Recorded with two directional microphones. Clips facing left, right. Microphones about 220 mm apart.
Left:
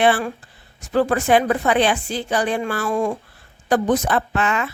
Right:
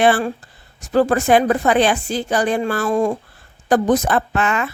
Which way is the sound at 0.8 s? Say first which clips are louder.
Right 3 dB; 45° right (ahead or behind).